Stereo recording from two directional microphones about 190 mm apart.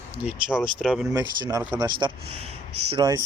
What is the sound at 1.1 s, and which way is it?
Speech, 20° right (ahead or behind).